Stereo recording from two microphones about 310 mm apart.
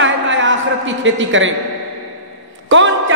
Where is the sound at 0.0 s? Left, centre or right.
Right.